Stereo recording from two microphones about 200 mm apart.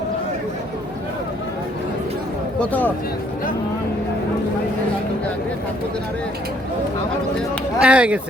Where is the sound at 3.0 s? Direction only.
50° left (ahead or behind).